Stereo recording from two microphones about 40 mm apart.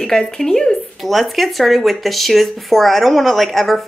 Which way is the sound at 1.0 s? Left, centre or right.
Centre.